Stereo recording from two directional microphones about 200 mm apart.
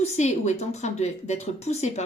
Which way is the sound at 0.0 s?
35° left (ahead or behind).